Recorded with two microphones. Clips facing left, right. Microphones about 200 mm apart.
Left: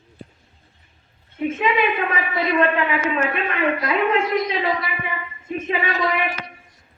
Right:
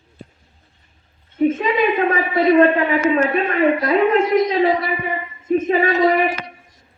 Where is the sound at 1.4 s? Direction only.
35° right (ahead or behind).